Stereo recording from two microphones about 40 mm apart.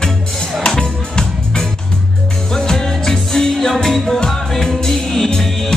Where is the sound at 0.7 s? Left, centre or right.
Centre.